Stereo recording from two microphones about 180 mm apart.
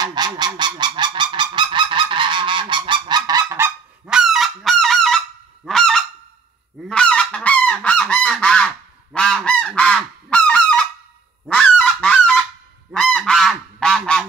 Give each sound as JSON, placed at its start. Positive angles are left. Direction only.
{"t": 0.0, "sound": "goose", "side_deg": -25}